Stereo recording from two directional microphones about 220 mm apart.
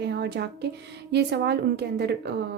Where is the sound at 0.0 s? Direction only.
50° right (ahead or behind).